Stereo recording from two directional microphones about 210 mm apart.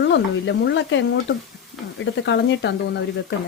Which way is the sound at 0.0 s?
60° left (ahead or behind).